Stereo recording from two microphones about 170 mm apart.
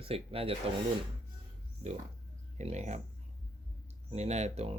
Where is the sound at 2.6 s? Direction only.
40° right (ahead or behind).